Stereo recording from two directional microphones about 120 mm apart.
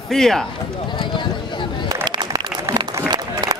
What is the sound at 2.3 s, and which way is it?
Applause, 35° right (ahead or behind).